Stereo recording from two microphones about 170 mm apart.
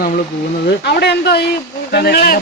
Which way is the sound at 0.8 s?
80° left.